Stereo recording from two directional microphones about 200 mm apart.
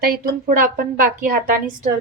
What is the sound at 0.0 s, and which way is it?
A woman's voice, 40° right (ahead or behind).